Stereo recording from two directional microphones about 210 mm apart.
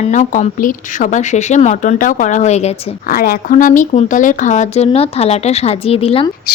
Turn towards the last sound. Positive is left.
turn(degrees=25)  # may be behind; listen again after turning